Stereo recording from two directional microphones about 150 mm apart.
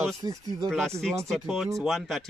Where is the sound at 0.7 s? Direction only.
5° left (ahead or behind).